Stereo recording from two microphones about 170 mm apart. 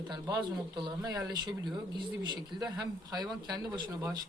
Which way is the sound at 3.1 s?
25° right (ahead or behind).